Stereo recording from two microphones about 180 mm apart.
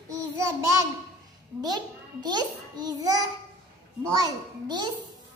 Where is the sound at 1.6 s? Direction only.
25° right (ahead or behind).